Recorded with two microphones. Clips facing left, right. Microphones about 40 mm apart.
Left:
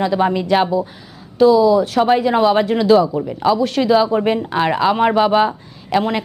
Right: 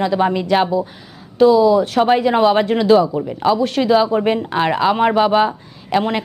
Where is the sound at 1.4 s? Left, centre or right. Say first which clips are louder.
Even; right.